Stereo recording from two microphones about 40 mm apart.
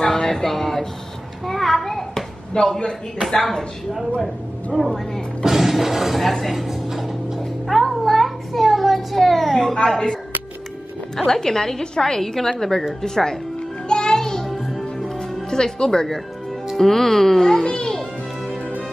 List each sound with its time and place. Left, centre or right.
0.0 s a sound: centre
2.8 s a woman's voice: centre
5.4 s speech: centre
6.5 s a sound: centre
9.8 s a woman's voice: centre
11.1 s a woman's voice: centre
13.8 s music: centre
14.5 s music: centre
15.0 s music: centre
16.7 s a woman's voice: centre